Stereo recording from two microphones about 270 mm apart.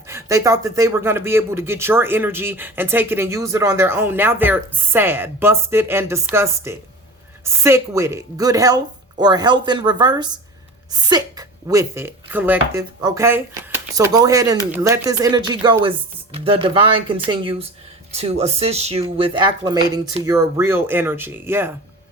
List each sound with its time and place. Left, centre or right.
0.1 s speech: centre